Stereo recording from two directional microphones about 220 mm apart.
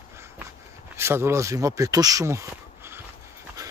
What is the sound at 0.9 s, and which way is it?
Speech, 10° right (ahead or behind).